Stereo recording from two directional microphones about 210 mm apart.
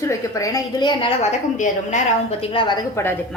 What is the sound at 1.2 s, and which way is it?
A woman's voice, 35° left (ahead or behind).